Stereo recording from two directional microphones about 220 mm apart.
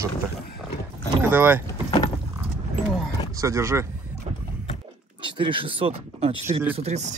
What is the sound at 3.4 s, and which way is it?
Speech, 15° right (ahead or behind).